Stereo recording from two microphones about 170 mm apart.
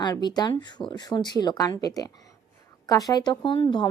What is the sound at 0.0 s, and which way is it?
Speech, 25° left (ahead or behind).